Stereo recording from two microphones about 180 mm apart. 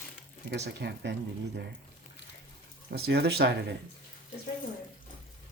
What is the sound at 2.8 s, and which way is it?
Speech, 60° right (ahead or behind).